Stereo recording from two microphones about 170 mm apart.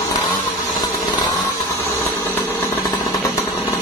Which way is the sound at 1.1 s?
25° left (ahead or behind).